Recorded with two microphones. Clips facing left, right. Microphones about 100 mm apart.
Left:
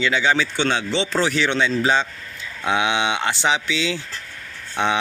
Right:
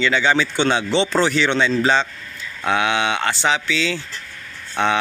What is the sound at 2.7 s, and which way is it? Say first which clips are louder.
Speech: right 1 dB; 15° left (ahead or behind).